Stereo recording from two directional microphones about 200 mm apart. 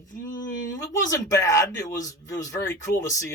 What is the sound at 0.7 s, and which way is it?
Speech, 15° left (ahead or behind).